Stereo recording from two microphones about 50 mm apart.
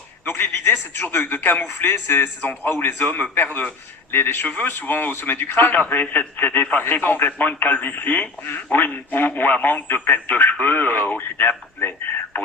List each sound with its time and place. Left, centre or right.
0.3 s a man's voice: left
1.0 s speech: left
2.8 s speech: left